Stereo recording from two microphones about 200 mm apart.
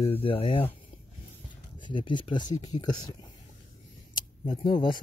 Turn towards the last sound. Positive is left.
turn(degrees=25)  # may be behind; listen again after turning